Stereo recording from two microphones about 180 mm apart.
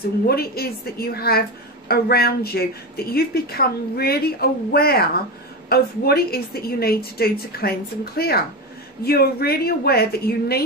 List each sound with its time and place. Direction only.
0.3 s speech: 60° left (ahead or behind)